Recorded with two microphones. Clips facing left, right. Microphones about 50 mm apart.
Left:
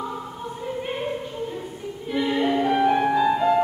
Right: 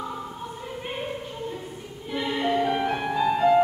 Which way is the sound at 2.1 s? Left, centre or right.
Centre.